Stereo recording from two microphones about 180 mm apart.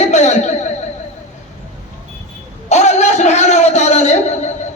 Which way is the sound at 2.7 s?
40° left (ahead or behind).